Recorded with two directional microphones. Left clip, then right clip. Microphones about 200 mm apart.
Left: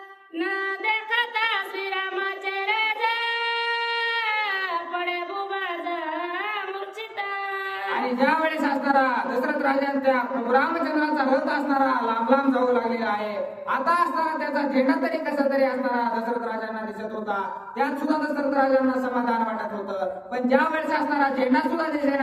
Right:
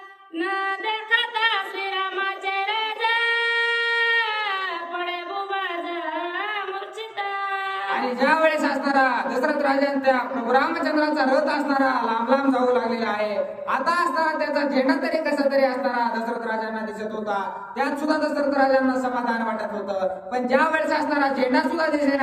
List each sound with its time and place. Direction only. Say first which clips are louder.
0.9 s a sound: even; 10° left (ahead or behind)
2.6 s singing: left 3 dB; 15° left (ahead or behind)
8.2 s a woman's voice: right 4 dB; 15° right (ahead or behind)
17.3 s a woman's voice: even; 15° right (ahead or behind)